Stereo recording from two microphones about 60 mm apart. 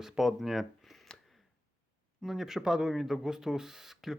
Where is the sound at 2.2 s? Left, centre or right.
Centre.